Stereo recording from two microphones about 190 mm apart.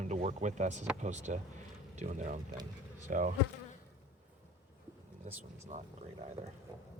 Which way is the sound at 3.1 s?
45° right (ahead or behind).